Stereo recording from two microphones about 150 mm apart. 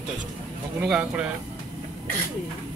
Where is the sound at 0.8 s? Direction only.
5° right (ahead or behind).